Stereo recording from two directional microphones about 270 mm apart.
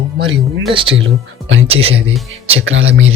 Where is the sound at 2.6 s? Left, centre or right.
Right.